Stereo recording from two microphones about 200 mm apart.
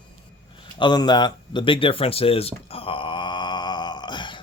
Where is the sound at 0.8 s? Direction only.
20° left (ahead or behind).